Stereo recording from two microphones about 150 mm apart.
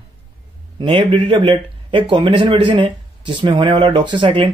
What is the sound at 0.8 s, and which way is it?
Speech, 35° right (ahead or behind).